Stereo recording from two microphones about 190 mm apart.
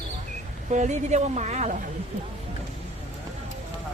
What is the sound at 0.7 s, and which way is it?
Speech, 40° right (ahead or behind).